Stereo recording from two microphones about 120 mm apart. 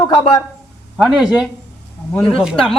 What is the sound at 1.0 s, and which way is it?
Speech, 5° right (ahead or behind).